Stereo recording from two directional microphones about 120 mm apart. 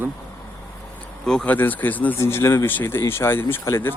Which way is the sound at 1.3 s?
10° left (ahead or behind).